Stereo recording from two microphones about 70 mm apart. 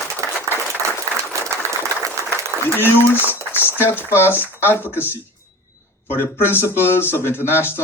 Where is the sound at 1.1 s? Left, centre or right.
Right.